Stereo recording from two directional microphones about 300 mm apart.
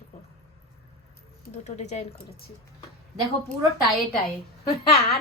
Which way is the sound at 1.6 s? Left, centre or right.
Left.